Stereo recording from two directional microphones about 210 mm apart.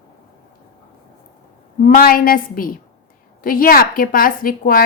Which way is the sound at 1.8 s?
45° left (ahead or behind).